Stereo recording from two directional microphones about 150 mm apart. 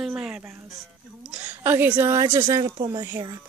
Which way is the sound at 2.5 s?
30° right (ahead or behind).